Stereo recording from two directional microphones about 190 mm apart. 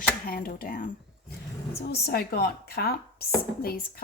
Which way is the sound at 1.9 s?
55° left (ahead or behind).